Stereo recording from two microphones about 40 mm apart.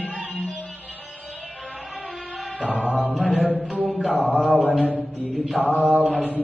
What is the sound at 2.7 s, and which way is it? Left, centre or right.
Music, right.